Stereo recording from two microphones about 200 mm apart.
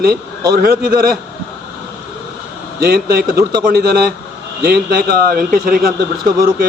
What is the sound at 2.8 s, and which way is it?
A man's voice, 50° right (ahead or behind).